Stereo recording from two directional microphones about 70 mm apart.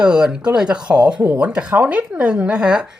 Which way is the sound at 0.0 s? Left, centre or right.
Centre.